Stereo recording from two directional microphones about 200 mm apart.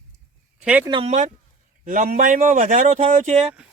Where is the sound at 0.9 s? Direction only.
30° right (ahead or behind).